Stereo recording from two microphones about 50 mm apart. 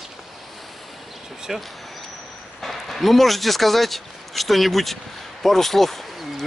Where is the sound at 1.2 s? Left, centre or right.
Centre.